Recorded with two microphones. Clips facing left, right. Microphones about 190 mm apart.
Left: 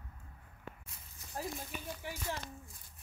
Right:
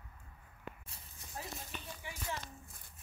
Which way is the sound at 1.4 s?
45° left (ahead or behind).